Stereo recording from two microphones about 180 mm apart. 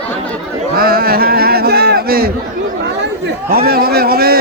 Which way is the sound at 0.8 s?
55° right (ahead or behind).